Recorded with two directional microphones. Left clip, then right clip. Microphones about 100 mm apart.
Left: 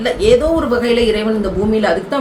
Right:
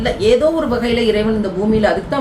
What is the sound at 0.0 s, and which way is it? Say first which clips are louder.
A woman's voice: left 1 dB; 20° left (ahead or behind).